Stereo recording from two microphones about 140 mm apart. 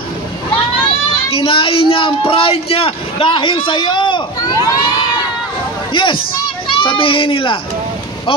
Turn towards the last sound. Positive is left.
turn(degrees=40)  # may be behind; listen again after turning